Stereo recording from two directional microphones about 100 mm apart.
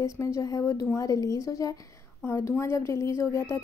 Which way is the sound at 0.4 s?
35° left (ahead or behind).